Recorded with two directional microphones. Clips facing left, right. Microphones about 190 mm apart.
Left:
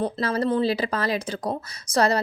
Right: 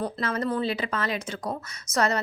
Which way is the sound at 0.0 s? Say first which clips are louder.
Left 4 dB; 30° left (ahead or behind).